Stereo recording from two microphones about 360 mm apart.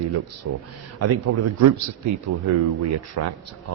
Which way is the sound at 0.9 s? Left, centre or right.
Right.